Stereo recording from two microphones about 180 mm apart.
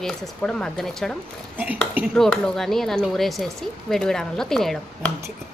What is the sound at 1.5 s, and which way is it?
Speech, 10° right (ahead or behind).